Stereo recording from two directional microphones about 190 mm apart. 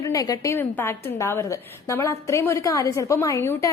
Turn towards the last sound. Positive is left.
turn(degrees=15)  # may be behind; listen again after turning